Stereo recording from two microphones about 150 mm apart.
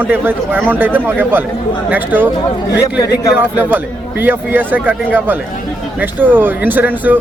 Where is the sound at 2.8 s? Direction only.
20° left (ahead or behind).